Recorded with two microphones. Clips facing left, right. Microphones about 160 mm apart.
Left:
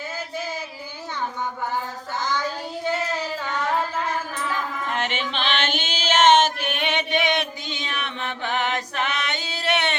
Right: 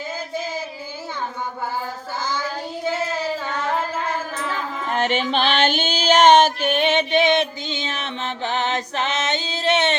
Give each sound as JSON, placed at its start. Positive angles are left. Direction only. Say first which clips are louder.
{"t": 2.2, "sound": "child singing", "louder": "left 1 dB", "side_deg": 20}
{"t": 4.9, "sound": "female singing", "louder": "right 9 dB", "side_deg": -35}